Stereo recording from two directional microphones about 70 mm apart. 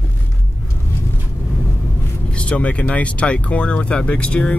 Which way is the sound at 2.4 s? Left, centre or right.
Centre.